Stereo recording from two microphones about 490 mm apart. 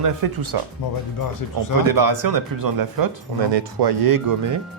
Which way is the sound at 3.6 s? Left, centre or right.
Right.